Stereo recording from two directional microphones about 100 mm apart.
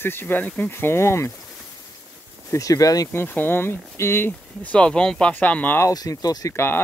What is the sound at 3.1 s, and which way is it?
Speech, 20° left (ahead or behind).